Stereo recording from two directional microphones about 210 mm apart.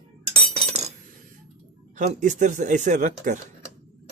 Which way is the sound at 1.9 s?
35° right (ahead or behind).